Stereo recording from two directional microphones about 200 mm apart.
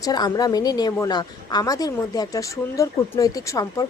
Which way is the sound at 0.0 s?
20° left (ahead or behind).